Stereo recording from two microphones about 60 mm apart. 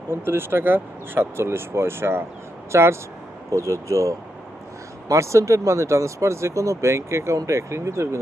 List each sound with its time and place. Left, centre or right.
0.1 s speech: right